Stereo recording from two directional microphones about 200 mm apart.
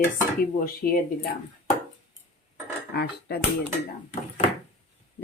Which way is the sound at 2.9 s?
50° left (ahead or behind).